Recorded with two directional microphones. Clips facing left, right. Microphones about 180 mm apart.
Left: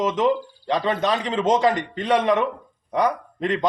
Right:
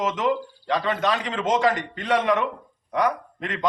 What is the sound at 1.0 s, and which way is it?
A man's voice, 20° left (ahead or behind).